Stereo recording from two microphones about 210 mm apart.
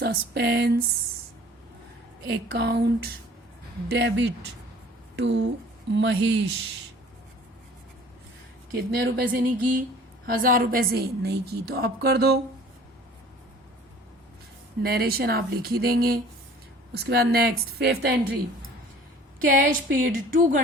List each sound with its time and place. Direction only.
0.0 s a woman's voice: 50° right (ahead or behind)
2.2 s a woman's voice: 50° right (ahead or behind)
8.7 s a woman's voice: 55° right (ahead or behind)
10.2 s a woman's voice: 40° right (ahead or behind)
14.8 s a woman's voice: 50° right (ahead or behind)
19.5 s speech: 40° right (ahead or behind)